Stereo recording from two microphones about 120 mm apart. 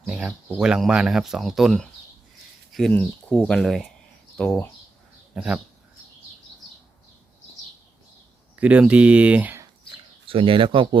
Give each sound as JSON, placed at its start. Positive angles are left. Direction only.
{"t": 0.0, "sound": "a sound", "side_deg": -5}
{"t": 0.6, "sound": "speech", "side_deg": -5}
{"t": 2.9, "sound": "speech", "side_deg": 10}
{"t": 5.3, "sound": "speech", "side_deg": -5}
{"t": 8.5, "sound": "speech", "side_deg": -10}
{"t": 10.2, "sound": "speech", "side_deg": -45}